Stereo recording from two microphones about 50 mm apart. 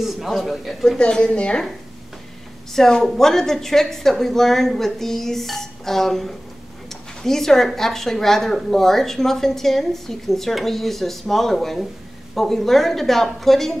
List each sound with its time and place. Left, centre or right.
0.0 s a man's voice: centre
0.8 s a woman's voice: centre
2.7 s a woman's voice: centre